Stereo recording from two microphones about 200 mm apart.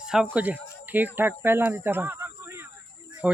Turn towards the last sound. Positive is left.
turn(degrees=-5)  # may be behind; listen again after turning